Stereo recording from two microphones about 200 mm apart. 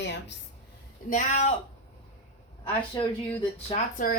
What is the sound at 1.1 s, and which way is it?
Speech, 35° left (ahead or behind).